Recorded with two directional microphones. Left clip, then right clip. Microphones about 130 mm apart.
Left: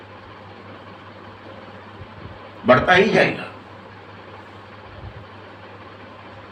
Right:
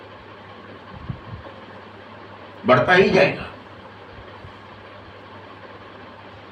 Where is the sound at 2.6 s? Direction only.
10° left (ahead or behind).